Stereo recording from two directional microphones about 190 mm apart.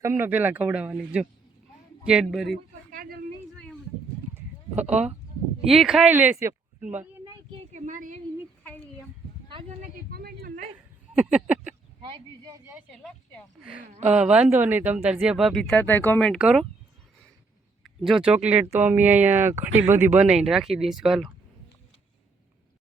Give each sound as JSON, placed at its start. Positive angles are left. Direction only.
{"t": 0.0, "sound": "speech", "side_deg": -10}
{"t": 2.9, "sound": "a sound", "side_deg": -50}
{"t": 4.4, "sound": "a sound", "side_deg": -10}
{"t": 5.6, "sound": "speech", "side_deg": 0}
{"t": 7.7, "sound": "speech", "side_deg": -40}
{"t": 9.5, "sound": "speech", "side_deg": -25}
{"t": 9.8, "sound": "a woman's voice", "side_deg": -55}
{"t": 11.1, "sound": "a sound", "side_deg": -5}
{"t": 12.0, "sound": "speech", "side_deg": -25}
{"t": 12.9, "sound": "speech", "side_deg": 5}
{"t": 17.8, "sound": "speech", "side_deg": 0}